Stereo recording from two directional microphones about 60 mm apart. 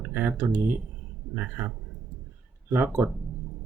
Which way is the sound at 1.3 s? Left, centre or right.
Right.